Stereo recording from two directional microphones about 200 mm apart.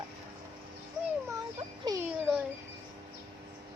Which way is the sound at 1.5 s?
25° right (ahead or behind).